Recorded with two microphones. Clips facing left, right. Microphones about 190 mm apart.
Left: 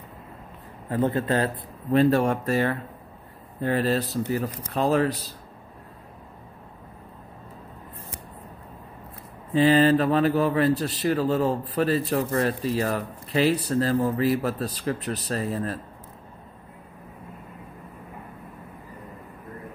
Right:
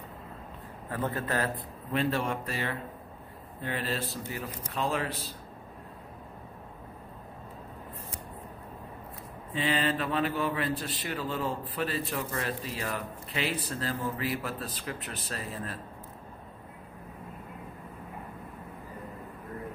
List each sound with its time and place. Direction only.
0.8 s a man's voice: 25° left (ahead or behind)
1.9 s speech: 40° left (ahead or behind)
9.5 s speech: 40° left (ahead or behind)